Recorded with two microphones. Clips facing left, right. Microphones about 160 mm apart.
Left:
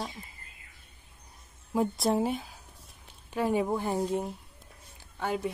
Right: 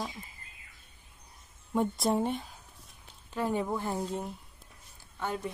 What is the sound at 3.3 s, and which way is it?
Speech, 15° left (ahead or behind).